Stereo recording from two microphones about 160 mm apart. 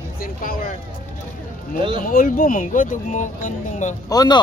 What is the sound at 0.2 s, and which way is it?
Speech, 60° left (ahead or behind).